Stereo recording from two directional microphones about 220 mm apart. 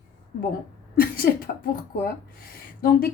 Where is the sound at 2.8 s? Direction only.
40° left (ahead or behind).